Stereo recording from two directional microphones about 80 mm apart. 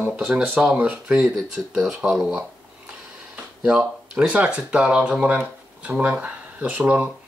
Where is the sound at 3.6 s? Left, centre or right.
Centre.